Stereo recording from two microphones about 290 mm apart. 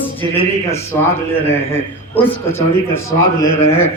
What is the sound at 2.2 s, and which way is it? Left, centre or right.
Speech, centre.